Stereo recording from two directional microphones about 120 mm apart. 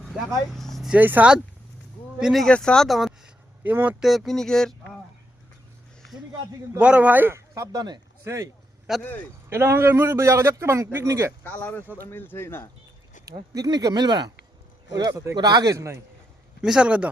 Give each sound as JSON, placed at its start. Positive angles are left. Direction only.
{"t": 0.0, "sound": "speech", "side_deg": 5}
{"t": 0.9, "sound": "speech", "side_deg": -15}
{"t": 2.1, "sound": "speech", "side_deg": -5}
{"t": 3.6, "sound": "speech", "side_deg": -15}
{"t": 4.0, "sound": "speech", "side_deg": 0}
{"t": 6.7, "sound": "a man's voice", "side_deg": -10}
{"t": 9.0, "sound": "speech", "side_deg": 15}
{"t": 9.5, "sound": "a man's voice", "side_deg": -20}
{"t": 11.4, "sound": "speech", "side_deg": 10}
{"t": 13.2, "sound": "a man's voice", "side_deg": -30}
{"t": 16.6, "sound": "speech", "side_deg": -5}